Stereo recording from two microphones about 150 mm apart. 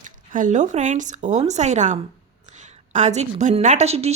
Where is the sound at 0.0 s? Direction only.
60° right (ahead or behind).